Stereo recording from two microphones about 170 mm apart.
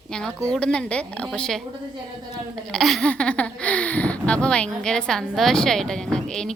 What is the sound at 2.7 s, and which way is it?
Speech, centre (ahead or behind).